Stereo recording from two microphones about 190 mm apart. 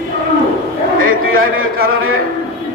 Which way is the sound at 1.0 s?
90° right.